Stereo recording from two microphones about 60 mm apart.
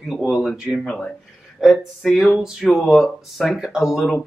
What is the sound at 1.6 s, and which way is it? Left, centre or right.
Speech, centre.